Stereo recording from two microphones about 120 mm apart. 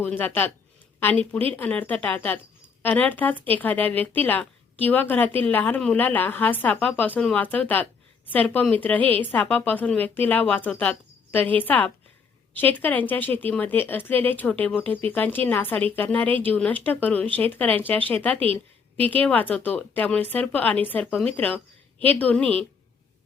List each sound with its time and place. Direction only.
0.0 s a woman's voice: 15° left (ahead or behind)
18.3 s a woman's voice: 55° right (ahead or behind)
19.2 s a woman's voice: 15° left (ahead or behind)